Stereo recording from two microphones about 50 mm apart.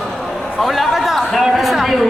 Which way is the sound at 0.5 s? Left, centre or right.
Centre.